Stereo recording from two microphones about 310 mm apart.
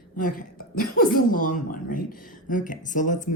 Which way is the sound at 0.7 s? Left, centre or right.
Left.